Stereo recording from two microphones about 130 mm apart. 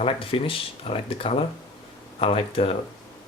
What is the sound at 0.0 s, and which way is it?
Speech, 45° left (ahead or behind).